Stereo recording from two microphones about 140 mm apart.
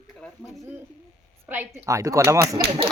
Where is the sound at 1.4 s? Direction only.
15° right (ahead or behind).